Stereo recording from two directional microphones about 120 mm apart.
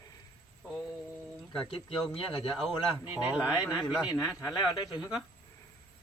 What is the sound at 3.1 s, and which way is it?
Speech, 10° right (ahead or behind).